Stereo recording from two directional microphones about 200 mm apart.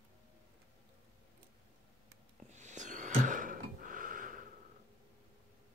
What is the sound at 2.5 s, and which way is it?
Gasp, 35° right (ahead or behind).